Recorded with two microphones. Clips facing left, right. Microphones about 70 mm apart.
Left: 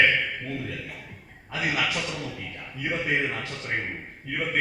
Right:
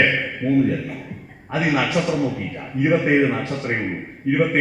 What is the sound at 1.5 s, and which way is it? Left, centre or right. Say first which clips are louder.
Speech: right 8 dB; right.